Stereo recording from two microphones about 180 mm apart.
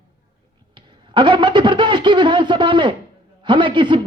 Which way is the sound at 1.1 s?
25° right (ahead or behind).